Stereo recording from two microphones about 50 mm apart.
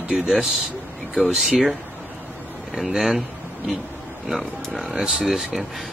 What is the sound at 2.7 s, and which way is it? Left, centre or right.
Speech, centre.